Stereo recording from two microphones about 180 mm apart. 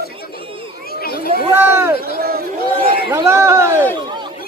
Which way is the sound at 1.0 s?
55° left (ahead or behind).